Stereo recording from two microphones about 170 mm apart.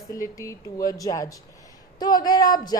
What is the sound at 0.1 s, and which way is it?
A woman's voice, 20° left (ahead or behind).